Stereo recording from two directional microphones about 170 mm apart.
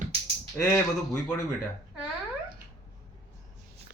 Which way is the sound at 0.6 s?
20° left (ahead or behind).